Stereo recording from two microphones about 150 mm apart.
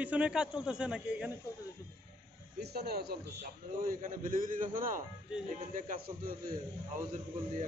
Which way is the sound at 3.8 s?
65° right (ahead or behind).